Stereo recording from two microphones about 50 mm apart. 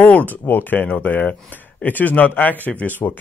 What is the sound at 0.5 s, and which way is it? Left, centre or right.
A man's voice, left.